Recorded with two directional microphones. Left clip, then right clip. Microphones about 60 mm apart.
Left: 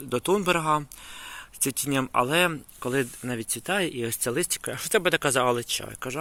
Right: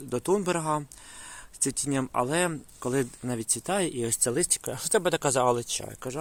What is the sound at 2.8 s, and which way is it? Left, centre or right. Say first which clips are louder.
Speech: left 1 dB; right.